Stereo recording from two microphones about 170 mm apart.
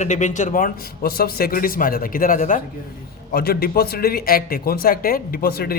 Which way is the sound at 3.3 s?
65° left (ahead or behind).